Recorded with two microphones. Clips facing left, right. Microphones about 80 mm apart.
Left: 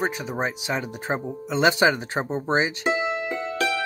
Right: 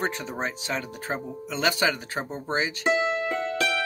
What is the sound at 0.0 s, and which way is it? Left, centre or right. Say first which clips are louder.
Speech: left 3 dB; centre.